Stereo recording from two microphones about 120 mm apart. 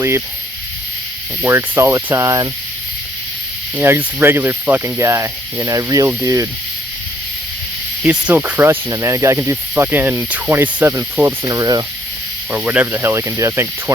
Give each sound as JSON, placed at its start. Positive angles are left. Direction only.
{"t": 1.5, "sound": "speech", "side_deg": -20}
{"t": 3.8, "sound": "speech", "side_deg": -20}
{"t": 8.0, "sound": "speech", "side_deg": -15}
{"t": 12.5, "sound": "speech", "side_deg": -15}